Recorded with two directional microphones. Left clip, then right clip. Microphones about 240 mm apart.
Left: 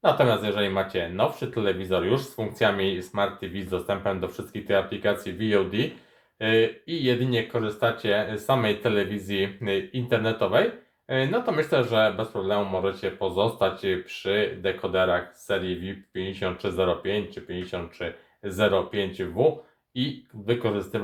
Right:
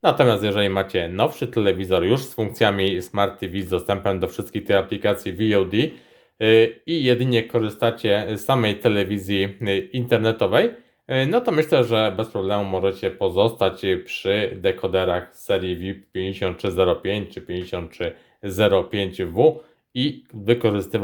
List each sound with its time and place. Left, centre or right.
0.0 s speech: right